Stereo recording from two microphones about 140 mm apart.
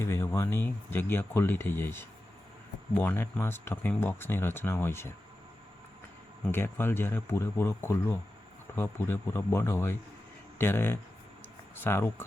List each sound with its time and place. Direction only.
0.0 s speech: 20° left (ahead or behind)
6.5 s speech: 15° left (ahead or behind)